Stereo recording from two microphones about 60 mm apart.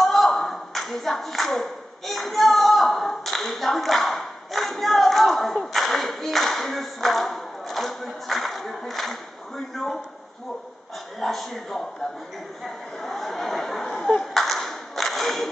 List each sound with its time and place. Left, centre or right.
0.0 s clapping: centre
11.1 s a sound: centre
13.0 s clapping: centre